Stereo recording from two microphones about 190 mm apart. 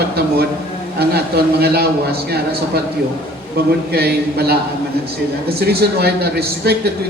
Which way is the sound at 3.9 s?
55° right (ahead or behind).